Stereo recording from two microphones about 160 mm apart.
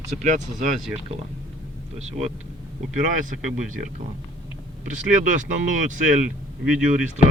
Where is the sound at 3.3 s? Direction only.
55° right (ahead or behind).